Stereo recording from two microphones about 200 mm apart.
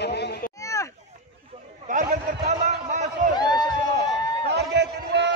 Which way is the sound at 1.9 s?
40° right (ahead or behind).